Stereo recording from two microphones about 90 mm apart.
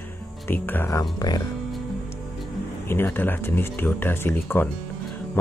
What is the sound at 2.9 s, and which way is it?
Speech, 25° left (ahead or behind).